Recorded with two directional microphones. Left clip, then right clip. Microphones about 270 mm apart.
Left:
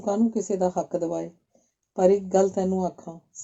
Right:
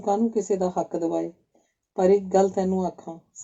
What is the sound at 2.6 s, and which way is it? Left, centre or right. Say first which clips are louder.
Speech: right 1 dB; left.